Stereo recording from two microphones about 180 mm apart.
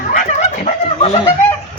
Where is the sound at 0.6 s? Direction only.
40° left (ahead or behind).